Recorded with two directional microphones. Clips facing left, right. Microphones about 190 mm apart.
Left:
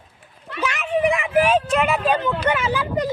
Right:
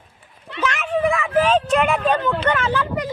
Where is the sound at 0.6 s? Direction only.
5° left (ahead or behind).